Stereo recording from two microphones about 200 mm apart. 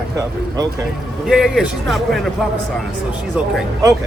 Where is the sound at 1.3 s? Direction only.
Centre (ahead or behind).